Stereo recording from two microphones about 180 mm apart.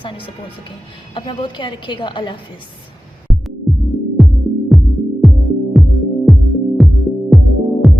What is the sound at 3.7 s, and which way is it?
Music, centre (ahead or behind).